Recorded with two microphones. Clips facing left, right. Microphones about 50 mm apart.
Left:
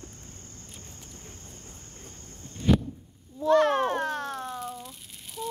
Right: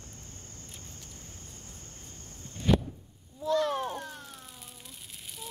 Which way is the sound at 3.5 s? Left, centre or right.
Left.